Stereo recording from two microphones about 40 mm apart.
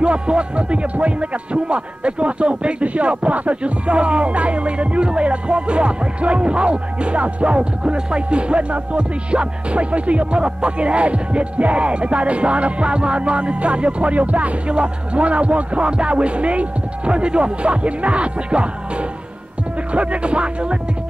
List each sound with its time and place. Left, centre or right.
0.0 s speech: right